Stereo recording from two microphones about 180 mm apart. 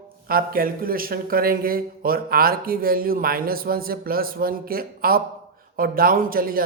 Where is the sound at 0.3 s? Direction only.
55° right (ahead or behind).